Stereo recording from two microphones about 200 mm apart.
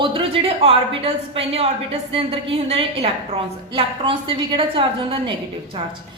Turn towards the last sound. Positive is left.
turn(degrees=-25)  # may be behind; listen again after turning